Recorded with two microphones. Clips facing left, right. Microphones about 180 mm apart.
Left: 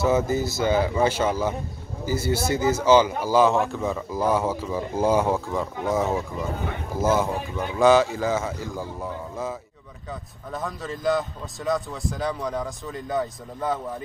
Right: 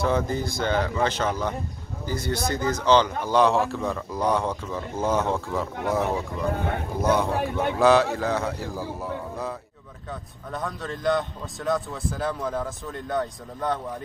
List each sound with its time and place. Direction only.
0.0 s speech: 5° left (ahead or behind)
7.3 s a man's voice: 65° right (ahead or behind)
7.8 s speech: centre (ahead or behind)